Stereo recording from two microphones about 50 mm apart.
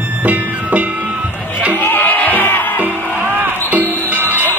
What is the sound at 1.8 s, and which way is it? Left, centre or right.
Music, left.